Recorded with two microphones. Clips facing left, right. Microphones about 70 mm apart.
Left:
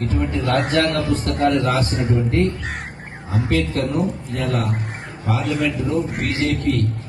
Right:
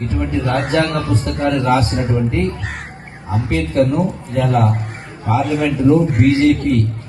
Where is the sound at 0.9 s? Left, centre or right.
Right.